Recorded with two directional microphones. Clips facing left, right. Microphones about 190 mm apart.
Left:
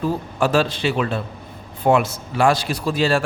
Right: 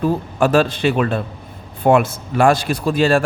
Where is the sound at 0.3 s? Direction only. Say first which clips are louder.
Right 3 dB; 55° right (ahead or behind).